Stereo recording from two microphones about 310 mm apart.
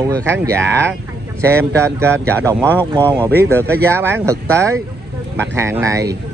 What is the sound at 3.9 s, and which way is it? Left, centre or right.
Speech, centre.